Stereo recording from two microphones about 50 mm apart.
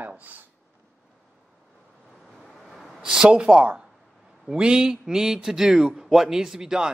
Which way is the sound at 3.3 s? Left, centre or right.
Right.